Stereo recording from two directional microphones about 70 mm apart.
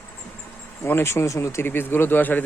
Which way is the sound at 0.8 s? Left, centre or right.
Left.